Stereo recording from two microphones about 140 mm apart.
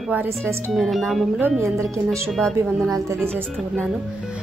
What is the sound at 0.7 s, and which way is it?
Speech, centre (ahead or behind).